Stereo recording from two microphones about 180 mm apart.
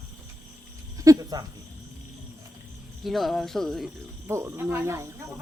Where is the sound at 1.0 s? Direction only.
20° right (ahead or behind).